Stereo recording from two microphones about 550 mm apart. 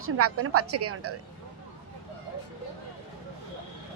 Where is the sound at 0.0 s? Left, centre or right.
Right.